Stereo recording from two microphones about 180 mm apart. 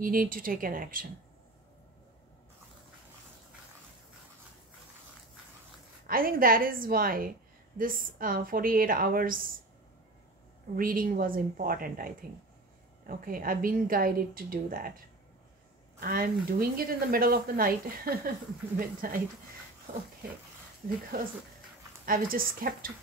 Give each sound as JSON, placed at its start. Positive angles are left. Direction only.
{"t": 0.0, "sound": "a woman's voice", "side_deg": -50}
{"t": 6.0, "sound": "a woman's voice", "side_deg": -55}
{"t": 10.8, "sound": "a woman's voice", "side_deg": -50}
{"t": 16.0, "sound": "speech", "side_deg": -55}
{"t": 21.1, "sound": "a woman's voice", "side_deg": -55}